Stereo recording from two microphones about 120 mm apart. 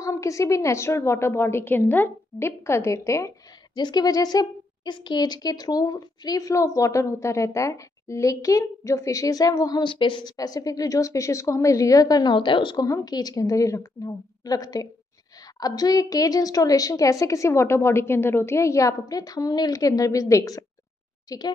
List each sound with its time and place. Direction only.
0.0 s a woman's voice: 25° left (ahead or behind)
3.7 s a woman's voice: 35° left (ahead or behind)
10.3 s a woman's voice: 30° left (ahead or behind)
12.8 s a woman's voice: 30° left (ahead or behind)